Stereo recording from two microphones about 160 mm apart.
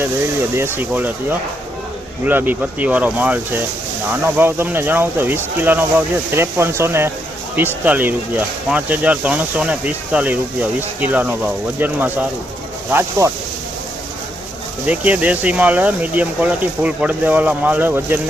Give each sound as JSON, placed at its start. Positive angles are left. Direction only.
{"t": 0.5, "sound": "speech", "side_deg": -15}
{"t": 14.8, "sound": "speech", "side_deg": -10}